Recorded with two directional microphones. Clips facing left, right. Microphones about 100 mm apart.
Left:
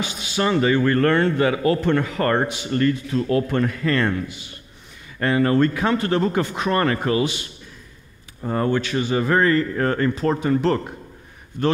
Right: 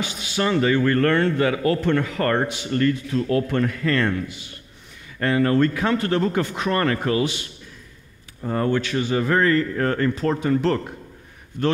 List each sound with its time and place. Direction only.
0.0 s speech: 20° left (ahead or behind)